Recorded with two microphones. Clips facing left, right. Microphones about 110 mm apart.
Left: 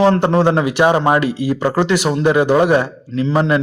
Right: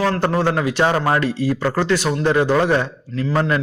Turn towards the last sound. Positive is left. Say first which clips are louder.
# left 4 dB
turn(degrees=20)  # may be behind; listen again after turning